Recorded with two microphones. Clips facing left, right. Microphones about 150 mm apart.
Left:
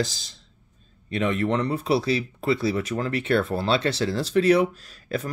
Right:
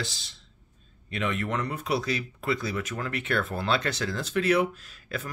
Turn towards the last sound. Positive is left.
turn(degrees=35)  # may be behind; listen again after turning